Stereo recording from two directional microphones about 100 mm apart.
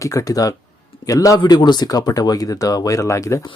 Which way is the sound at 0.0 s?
35° left (ahead or behind).